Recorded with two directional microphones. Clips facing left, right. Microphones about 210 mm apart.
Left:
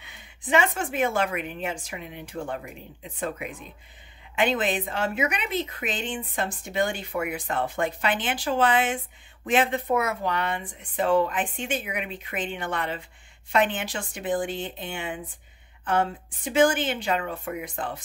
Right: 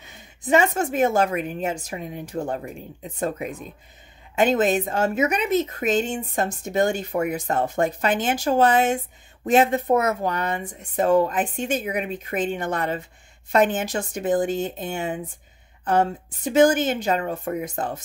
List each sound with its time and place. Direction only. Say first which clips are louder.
0.0 s a woman's voice: right 5 dB; 40° right (ahead or behind)